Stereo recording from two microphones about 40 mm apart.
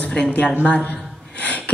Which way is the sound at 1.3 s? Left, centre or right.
Left.